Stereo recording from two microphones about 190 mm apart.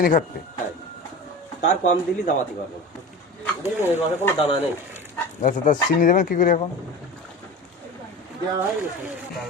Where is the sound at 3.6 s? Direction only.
10° right (ahead or behind).